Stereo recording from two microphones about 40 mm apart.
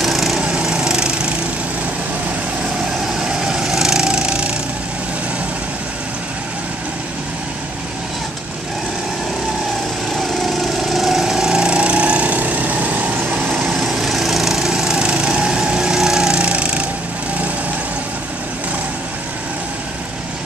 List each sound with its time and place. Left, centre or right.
0.0 s lawn mower: centre
0.4 s lawn mower: right
3.2 s splinter: centre
10.4 s lawn mower: centre; by 13.1 s right
13.7 s lawn mower: centre
15.0 s lawn mower: right